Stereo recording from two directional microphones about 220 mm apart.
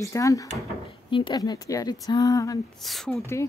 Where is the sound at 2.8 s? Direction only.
Centre (ahead or behind).